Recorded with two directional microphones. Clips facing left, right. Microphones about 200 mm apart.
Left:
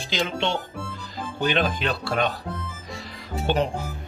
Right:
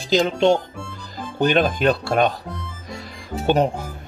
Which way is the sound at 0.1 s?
40° right (ahead or behind).